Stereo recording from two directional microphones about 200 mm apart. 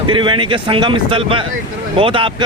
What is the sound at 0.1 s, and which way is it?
Speech, 25° right (ahead or behind).